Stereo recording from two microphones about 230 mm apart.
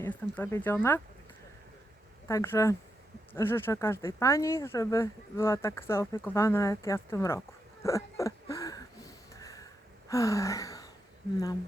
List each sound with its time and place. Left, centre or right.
0.0 s speech: centre
2.2 s speech: centre
10.1 s gasp: centre